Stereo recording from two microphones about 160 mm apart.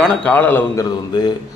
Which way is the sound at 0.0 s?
5° left (ahead or behind).